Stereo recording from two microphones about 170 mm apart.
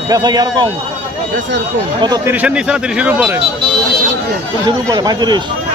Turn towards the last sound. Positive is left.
turn(degrees=-25)  # may be behind; listen again after turning